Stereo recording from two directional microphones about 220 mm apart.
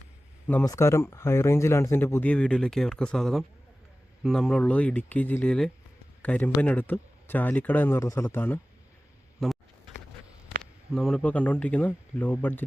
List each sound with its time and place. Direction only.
0.4 s speech: 10° left (ahead or behind)
10.6 s speech: centre (ahead or behind)